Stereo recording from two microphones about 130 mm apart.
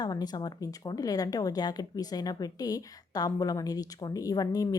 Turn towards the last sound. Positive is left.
turn(degrees=30)  # may be behind; listen again after turning